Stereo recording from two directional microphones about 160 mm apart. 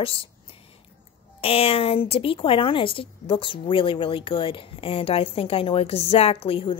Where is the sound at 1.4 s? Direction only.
35° left (ahead or behind).